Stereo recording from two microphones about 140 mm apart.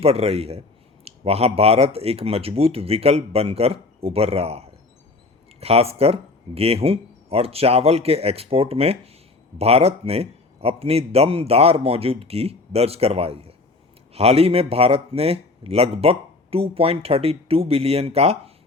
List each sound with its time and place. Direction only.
0.0 s speech: 45° right (ahead or behind)